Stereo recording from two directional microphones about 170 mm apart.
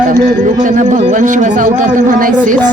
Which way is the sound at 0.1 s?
50° right (ahead or behind).